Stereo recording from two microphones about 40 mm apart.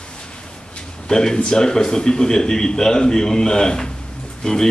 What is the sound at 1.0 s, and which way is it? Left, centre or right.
A man's voice, centre.